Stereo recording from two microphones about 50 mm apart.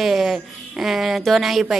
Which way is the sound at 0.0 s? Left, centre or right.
Centre.